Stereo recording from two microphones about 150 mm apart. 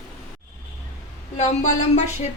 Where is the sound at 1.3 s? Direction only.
50° left (ahead or behind).